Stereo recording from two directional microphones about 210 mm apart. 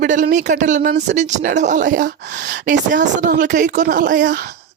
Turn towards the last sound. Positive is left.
turn(degrees=-50)  # may be behind; listen again after turning